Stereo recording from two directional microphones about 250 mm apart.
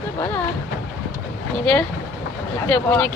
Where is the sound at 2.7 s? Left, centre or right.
Centre.